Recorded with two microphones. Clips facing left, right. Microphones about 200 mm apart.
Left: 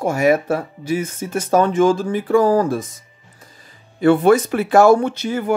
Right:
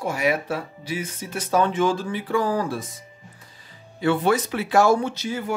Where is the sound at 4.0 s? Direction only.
50° left (ahead or behind).